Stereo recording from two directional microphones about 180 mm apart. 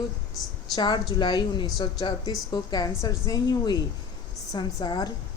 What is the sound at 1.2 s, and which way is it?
A woman's voice, 25° left (ahead or behind).